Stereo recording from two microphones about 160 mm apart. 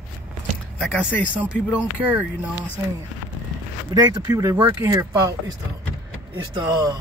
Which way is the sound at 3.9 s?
25° right (ahead or behind).